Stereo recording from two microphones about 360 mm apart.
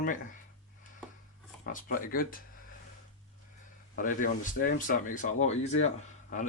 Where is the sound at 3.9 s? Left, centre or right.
Left.